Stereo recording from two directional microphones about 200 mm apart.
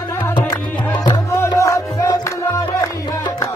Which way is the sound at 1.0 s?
20° left (ahead or behind).